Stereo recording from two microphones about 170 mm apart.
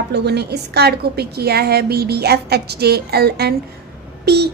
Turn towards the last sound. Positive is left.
turn(degrees=-70)  # may be behind; listen again after turning